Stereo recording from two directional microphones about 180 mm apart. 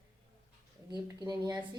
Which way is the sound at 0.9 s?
20° right (ahead or behind).